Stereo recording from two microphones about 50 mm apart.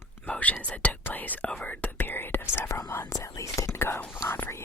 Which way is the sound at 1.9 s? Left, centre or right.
Left.